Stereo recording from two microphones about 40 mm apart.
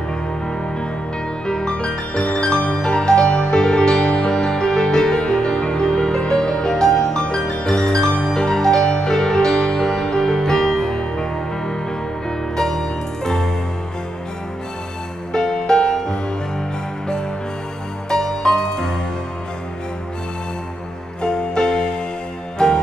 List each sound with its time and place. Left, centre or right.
1.5 s music: left
15.3 s music: centre
18.1 s music: centre
21.2 s music: centre